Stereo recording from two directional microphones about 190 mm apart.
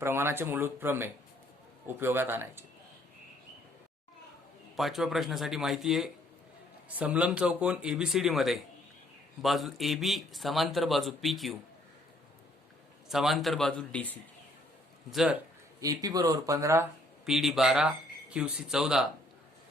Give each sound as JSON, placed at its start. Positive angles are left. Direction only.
{"t": 0.0, "sound": "speech", "side_deg": -10}
{"t": 4.8, "sound": "a man's voice", "side_deg": 0}
{"t": 13.1, "sound": "a man's voice", "side_deg": 0}
{"t": 15.8, "sound": "speech", "side_deg": -20}
{"t": 17.2, "sound": "a man's voice", "side_deg": 0}